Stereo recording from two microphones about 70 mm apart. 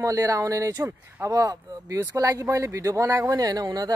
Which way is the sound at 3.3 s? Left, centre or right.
Right.